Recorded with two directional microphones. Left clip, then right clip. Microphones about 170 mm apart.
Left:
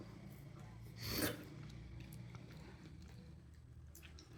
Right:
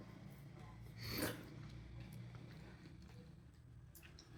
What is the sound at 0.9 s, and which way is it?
Filing, 20° left (ahead or behind).